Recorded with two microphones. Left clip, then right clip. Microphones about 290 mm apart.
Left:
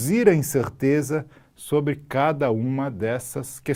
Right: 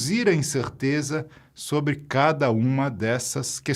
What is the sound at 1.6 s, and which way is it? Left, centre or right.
Speech, right.